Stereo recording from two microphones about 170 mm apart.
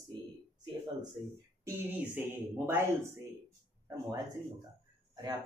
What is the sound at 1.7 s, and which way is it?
Speech, 10° right (ahead or behind).